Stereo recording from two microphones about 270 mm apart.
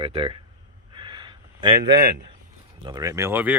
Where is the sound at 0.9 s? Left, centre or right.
Centre.